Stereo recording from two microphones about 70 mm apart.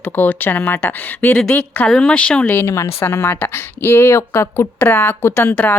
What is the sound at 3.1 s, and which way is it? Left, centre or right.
Speech, left.